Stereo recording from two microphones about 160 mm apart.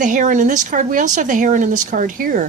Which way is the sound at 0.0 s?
55° right (ahead or behind).